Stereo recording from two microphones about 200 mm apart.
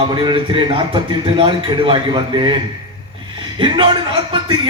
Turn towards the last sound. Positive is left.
turn(degrees=-25)  # may be behind; listen again after turning